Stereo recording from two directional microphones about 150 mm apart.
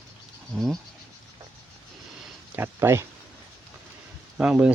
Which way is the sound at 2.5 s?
15° right (ahead or behind).